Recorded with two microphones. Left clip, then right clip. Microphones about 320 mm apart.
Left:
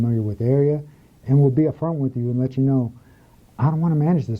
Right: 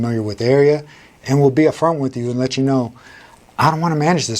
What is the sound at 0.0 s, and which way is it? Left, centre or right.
Speech, centre.